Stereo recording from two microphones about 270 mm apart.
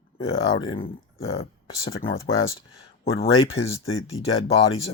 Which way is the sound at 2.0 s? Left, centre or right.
Left.